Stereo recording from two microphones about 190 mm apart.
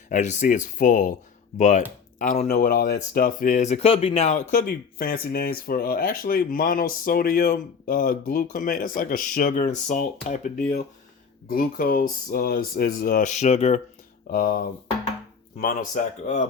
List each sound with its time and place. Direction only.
0.1 s speech: 40° left (ahead or behind)
14.3 s speech: 50° left (ahead or behind)
16.0 s speech: 45° left (ahead or behind)